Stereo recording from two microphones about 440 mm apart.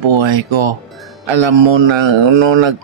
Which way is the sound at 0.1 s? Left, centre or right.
Right.